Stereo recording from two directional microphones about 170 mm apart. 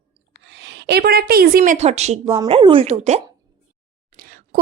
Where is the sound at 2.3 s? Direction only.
25° right (ahead or behind).